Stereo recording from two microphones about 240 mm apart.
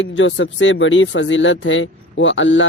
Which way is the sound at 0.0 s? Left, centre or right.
Left.